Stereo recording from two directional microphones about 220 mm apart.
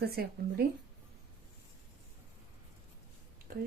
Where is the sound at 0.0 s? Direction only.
45° right (ahead or behind).